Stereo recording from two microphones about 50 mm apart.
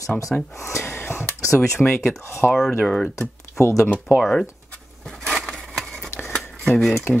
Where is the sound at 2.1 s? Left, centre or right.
Left.